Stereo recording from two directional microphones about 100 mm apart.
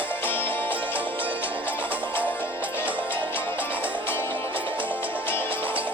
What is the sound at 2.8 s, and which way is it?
Music, 15° right (ahead or behind).